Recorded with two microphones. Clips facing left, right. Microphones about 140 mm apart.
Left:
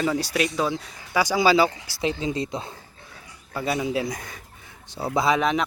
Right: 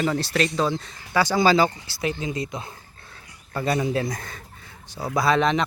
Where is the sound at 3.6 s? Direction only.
5° left (ahead or behind).